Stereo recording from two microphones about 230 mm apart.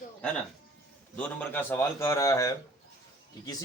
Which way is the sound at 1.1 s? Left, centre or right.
Centre.